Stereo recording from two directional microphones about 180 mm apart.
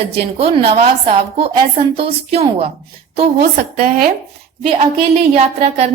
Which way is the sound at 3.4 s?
55° right (ahead or behind).